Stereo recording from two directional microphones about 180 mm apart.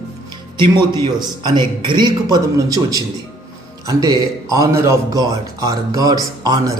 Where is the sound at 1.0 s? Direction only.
25° right (ahead or behind).